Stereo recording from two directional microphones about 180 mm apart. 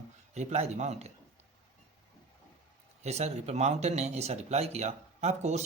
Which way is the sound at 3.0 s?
35° right (ahead or behind).